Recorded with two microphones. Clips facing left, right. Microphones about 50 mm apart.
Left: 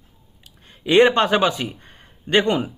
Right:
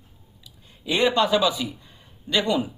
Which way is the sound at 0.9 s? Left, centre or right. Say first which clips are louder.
Left 6 dB; left.